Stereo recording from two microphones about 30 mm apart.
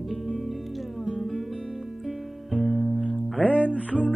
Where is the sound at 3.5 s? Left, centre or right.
Right.